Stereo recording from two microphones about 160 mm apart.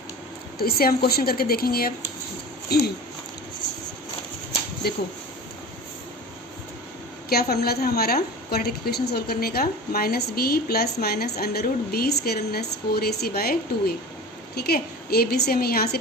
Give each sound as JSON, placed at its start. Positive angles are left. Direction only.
{"t": 0.6, "sound": "a woman's voice", "side_deg": 70}
{"t": 2.6, "sound": "a sound", "side_deg": 90}
{"t": 4.8, "sound": "a woman's voice", "side_deg": 75}
{"t": 7.3, "sound": "a woman's voice", "side_deg": 75}